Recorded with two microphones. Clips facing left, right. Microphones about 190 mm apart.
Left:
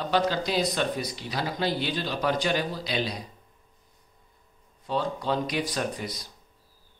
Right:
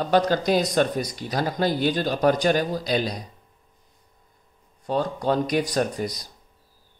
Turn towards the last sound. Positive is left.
turn(degrees=-45)  # may be behind; listen again after turning